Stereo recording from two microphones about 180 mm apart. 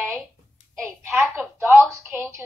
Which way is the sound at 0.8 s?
5° left (ahead or behind).